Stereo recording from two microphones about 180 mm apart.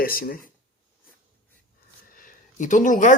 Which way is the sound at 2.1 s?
45° left (ahead or behind).